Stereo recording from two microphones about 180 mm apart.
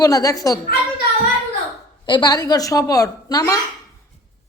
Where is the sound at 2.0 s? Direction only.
25° left (ahead or behind).